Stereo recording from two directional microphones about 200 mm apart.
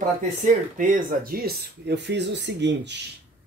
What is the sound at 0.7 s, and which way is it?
Speech, 40° right (ahead or behind).